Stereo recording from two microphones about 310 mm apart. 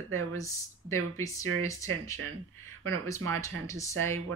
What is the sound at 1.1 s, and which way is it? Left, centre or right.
Speech, centre.